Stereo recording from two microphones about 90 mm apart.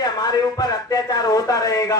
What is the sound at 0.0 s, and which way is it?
A man's voice, 45° left (ahead or behind).